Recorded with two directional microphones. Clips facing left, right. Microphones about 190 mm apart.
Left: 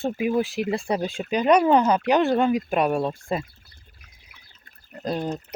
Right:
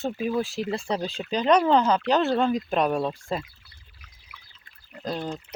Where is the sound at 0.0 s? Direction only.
10° left (ahead or behind).